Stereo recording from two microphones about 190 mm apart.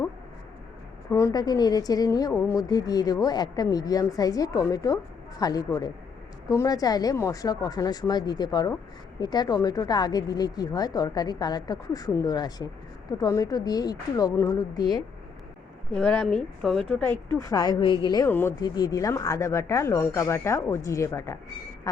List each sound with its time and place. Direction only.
1.1 s a woman's voice: 20° left (ahead or behind)
16.0 s a woman's voice: 5° left (ahead or behind)
17.3 s a woman's voice: 20° left (ahead or behind)
18.3 s speech: 10° left (ahead or behind)